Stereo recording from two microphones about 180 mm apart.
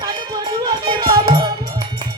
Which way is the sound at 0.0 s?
25° right (ahead or behind).